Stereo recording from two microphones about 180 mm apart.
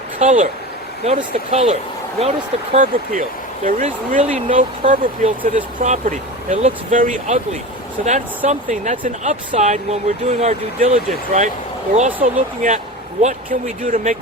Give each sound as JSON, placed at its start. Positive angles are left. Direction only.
{"t": 0.2, "sound": "speech", "side_deg": -40}
{"t": 2.7, "sound": "speech", "side_deg": -45}